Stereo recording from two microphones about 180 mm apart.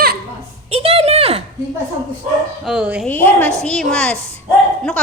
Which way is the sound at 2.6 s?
5° right (ahead or behind).